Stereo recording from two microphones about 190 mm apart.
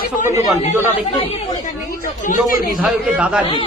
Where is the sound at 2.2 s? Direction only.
45° left (ahead or behind).